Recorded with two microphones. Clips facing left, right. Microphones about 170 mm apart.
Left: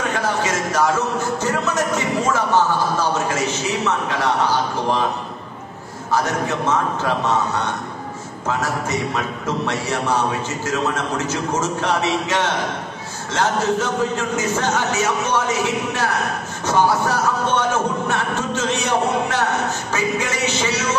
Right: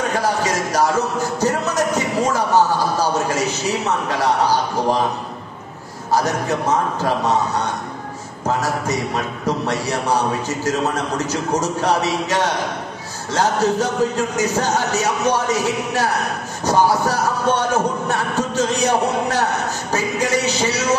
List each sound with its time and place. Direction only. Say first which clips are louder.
0.1 s a sound: right 2 dB; 35° right (ahead or behind)
6.1 s a man's voice: right 2 dB; 35° right (ahead or behind)
8.5 s a man's voice: right 2 dB; 35° right (ahead or behind)